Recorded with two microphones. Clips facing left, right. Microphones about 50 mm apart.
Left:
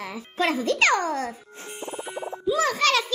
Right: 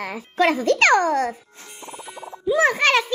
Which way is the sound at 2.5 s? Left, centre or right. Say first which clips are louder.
Right 4 dB; right.